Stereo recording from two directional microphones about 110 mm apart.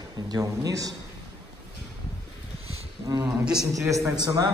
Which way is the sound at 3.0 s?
35° right (ahead or behind).